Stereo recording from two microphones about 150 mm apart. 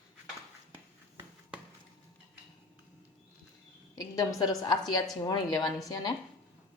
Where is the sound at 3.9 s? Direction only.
25° left (ahead or behind).